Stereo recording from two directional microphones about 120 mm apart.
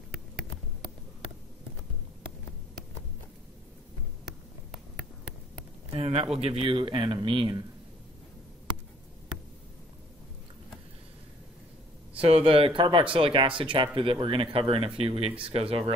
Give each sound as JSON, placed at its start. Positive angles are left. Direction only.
{"t": 5.9, "sound": "speech", "side_deg": -55}
{"t": 12.2, "sound": "speech", "side_deg": -55}